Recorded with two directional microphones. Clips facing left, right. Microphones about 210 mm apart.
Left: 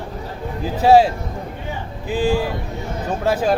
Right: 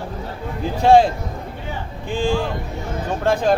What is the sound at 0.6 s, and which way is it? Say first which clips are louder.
Speech: even; 5° left (ahead or behind).